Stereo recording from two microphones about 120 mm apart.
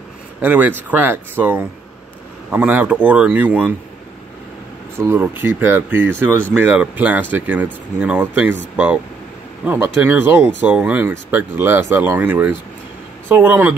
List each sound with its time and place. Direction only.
0.4 s speech: 15° right (ahead or behind)
4.9 s speech: 20° right (ahead or behind)